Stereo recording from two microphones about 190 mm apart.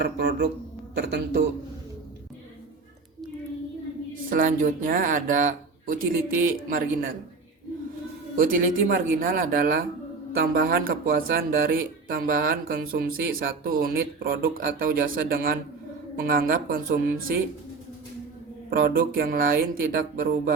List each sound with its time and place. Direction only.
0.0 s a man's voice: 60° right (ahead or behind)
4.3 s speech: 45° right (ahead or behind)
8.4 s speech: 50° right (ahead or behind)
18.7 s speech: 50° right (ahead or behind)